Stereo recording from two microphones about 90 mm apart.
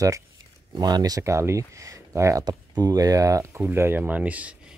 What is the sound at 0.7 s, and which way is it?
Speech, 50° right (ahead or behind).